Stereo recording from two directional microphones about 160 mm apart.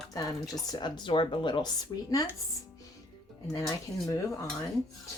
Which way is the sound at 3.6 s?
20° left (ahead or behind).